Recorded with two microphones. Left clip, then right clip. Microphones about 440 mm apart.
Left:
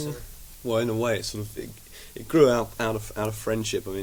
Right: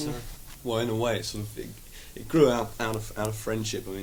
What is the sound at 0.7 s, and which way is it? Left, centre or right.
Speech, left.